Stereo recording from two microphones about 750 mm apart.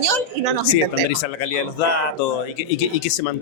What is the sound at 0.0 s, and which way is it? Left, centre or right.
Speech, right.